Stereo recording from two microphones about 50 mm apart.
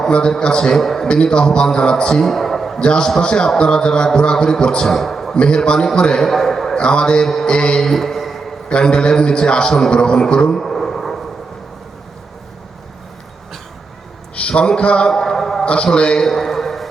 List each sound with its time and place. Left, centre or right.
0.1 s a man's voice: centre
2.7 s a man's voice: centre
5.3 s a man's voice: centre
6.7 s a man's voice: centre
7.3 s mantra: centre
7.5 s a man's voice: centre
7.9 s a sound: centre
8.7 s a man's voice: centre
10.6 s a sound: centre
14.3 s a sound: left
15.1 s a man's voice: centre
15.6 s a man's voice: left
16.2 s a sound: centre